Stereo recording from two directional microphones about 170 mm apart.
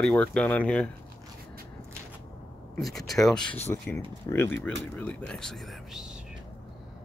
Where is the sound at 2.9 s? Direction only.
Centre (ahead or behind).